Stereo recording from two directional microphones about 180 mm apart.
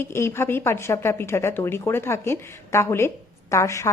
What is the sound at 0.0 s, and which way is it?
Speech, 15° left (ahead or behind).